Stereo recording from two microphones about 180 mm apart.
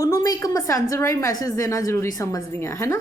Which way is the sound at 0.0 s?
20° left (ahead or behind).